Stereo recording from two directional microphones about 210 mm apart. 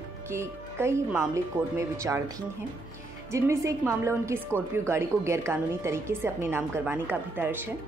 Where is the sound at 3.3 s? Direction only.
15° right (ahead or behind).